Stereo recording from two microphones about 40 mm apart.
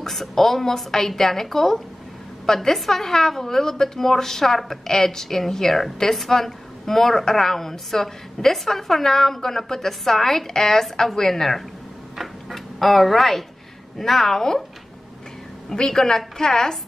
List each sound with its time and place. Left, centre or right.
0.0 s a woman's voice: centre
12.2 s a sound: centre
13.9 s a woman's voice: centre
15.7 s a woman's voice: centre